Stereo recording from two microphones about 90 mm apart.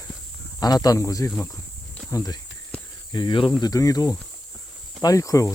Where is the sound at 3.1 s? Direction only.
60° left (ahead or behind).